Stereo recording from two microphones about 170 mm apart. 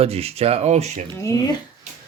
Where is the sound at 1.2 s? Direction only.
20° left (ahead or behind).